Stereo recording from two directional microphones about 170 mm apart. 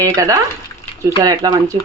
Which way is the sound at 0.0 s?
20° right (ahead or behind).